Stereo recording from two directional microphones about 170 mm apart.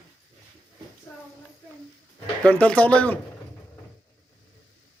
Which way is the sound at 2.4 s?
5° left (ahead or behind).